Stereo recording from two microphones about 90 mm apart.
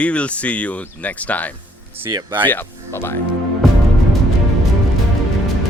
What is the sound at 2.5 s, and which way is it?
Speech, 25° left (ahead or behind).